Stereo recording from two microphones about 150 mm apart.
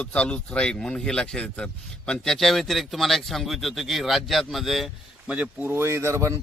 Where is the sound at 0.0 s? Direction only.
10° left (ahead or behind).